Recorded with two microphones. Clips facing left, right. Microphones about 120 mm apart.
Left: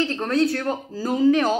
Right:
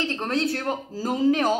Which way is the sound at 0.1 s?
25° right (ahead or behind).